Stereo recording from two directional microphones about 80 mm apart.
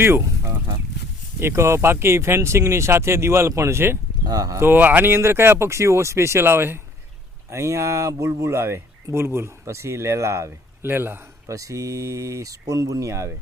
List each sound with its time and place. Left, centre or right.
0.0 s speech: right
4.3 s speech: right
4.5 s speech: right
11.5 s speech: right